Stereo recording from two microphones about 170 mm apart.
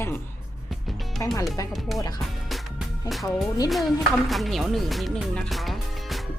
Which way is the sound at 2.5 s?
Centre (ahead or behind).